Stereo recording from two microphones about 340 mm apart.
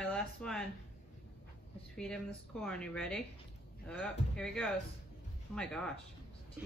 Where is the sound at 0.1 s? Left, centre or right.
Centre.